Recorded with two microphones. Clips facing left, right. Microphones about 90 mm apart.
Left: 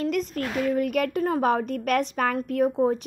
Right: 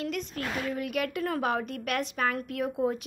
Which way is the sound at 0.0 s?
45° left (ahead or behind).